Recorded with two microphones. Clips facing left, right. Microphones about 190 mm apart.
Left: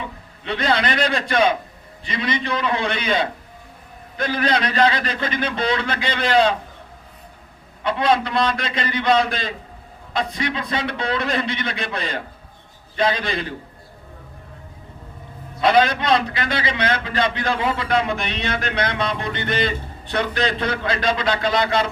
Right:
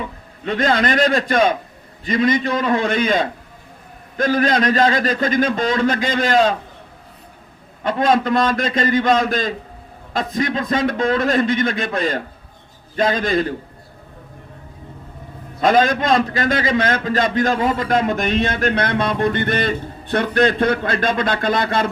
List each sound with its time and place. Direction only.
0.4 s a man's voice: 45° right (ahead or behind)
7.9 s a man's voice: 45° right (ahead or behind)
15.6 s a man's voice: 45° right (ahead or behind)